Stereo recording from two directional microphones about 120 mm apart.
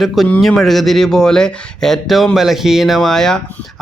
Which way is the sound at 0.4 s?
Centre (ahead or behind).